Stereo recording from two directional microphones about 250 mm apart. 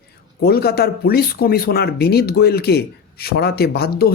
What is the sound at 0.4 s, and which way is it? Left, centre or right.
Speech, left.